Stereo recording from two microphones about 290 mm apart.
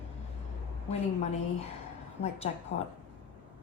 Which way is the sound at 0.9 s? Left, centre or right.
Left.